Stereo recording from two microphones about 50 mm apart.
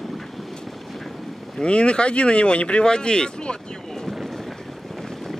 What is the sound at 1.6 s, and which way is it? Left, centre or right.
Speech, left.